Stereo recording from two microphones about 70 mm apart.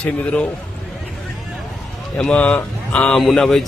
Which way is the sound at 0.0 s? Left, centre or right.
Centre.